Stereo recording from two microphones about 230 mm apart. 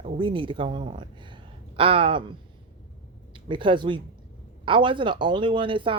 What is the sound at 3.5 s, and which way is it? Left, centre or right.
Speech, right.